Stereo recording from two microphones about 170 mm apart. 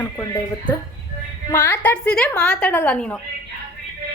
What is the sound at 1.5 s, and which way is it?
A woman's voice, 15° left (ahead or behind).